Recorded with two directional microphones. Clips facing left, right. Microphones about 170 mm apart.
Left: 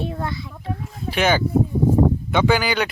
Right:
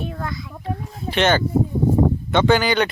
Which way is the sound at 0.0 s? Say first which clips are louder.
Left 2 dB; 30° left (ahead or behind).